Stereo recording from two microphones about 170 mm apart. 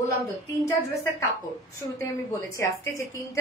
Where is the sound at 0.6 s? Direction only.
20° left (ahead or behind).